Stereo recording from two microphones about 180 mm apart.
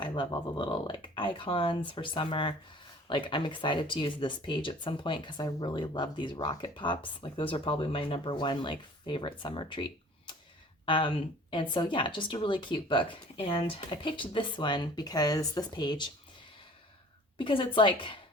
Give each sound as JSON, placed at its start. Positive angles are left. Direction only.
{"t": 0.0, "sound": "speech", "side_deg": 25}
{"t": 17.3, "sound": "speech", "side_deg": 30}